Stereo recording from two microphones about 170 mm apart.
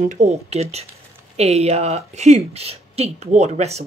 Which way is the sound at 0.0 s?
45° right (ahead or behind).